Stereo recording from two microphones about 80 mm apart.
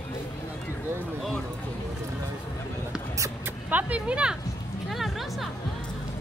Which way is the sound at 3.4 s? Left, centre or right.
Right.